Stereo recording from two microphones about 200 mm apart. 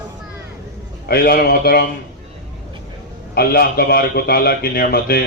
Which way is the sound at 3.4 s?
50° left (ahead or behind).